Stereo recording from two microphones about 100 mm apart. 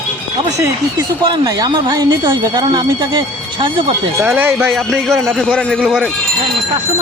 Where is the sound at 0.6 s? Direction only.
45° right (ahead or behind).